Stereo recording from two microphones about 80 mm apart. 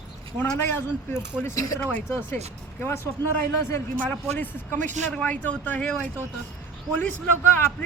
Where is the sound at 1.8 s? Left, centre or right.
Centre.